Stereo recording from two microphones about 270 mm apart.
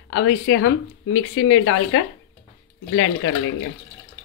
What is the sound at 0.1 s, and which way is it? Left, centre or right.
Speech, left.